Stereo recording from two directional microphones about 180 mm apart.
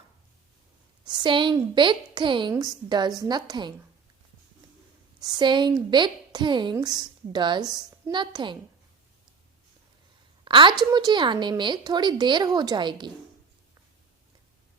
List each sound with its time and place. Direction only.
1.0 s a woman's voice: 25° right (ahead or behind)
5.2 s a woman's voice: 25° right (ahead or behind)
10.4 s a woman's voice: 25° right (ahead or behind)